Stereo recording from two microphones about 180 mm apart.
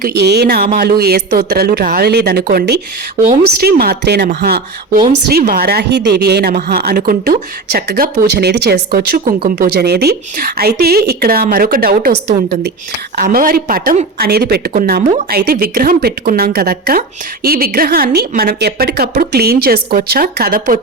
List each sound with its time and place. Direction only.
0.0 s speech: 65° right (ahead or behind)
13.1 s speech: 55° right (ahead or behind)